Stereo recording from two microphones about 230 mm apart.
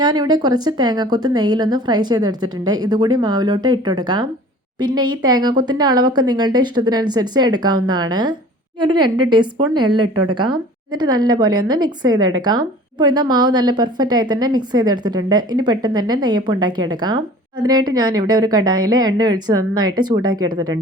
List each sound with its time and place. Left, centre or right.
0.0 s a woman's voice: centre
10.0 s a woman's voice: right
10.3 s a woman's voice: centre